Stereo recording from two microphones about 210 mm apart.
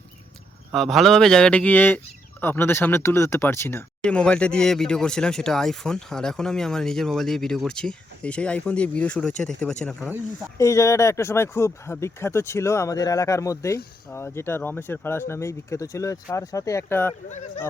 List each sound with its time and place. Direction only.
0.7 s speech: centre (ahead or behind)
10.6 s speech: 15° left (ahead or behind)
17.2 s speech: 35° left (ahead or behind)